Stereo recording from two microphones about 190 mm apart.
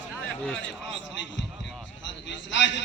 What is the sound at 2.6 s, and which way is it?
Speech, 70° left (ahead or behind).